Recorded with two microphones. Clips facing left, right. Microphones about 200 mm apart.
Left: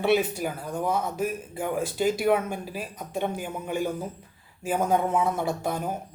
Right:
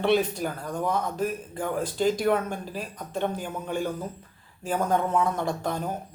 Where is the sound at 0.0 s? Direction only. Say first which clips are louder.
Even; 10° left (ahead or behind).